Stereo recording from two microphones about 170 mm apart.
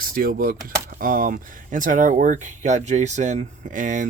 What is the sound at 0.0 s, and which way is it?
Speech, 60° right (ahead or behind).